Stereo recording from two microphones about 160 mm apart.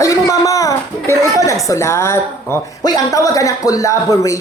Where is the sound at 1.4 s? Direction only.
20° left (ahead or behind).